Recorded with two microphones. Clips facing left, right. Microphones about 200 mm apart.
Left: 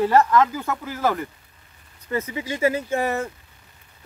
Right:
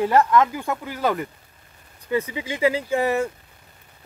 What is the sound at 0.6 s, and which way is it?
Speech, 20° right (ahead or behind).